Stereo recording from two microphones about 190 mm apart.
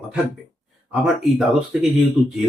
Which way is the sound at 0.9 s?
Centre (ahead or behind).